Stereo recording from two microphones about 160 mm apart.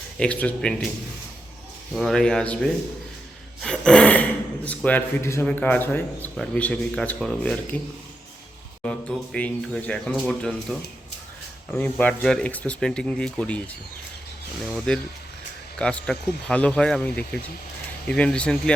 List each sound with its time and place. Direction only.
0.2 s speech: 10° left (ahead or behind)
2.0 s speech: centre (ahead or behind)
8.8 s speech: 5° left (ahead or behind)